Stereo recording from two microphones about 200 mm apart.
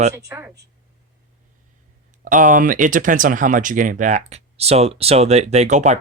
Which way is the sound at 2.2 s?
40° right (ahead or behind).